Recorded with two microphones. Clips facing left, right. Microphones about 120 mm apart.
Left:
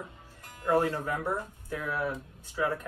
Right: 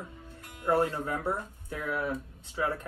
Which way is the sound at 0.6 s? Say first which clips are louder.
Even; 25° right (ahead or behind).